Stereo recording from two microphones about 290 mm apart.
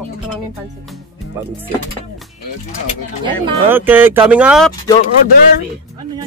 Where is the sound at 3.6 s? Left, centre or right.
Centre.